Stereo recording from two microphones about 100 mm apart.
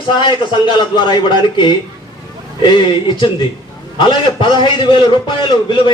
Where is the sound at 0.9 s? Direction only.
45° left (ahead or behind).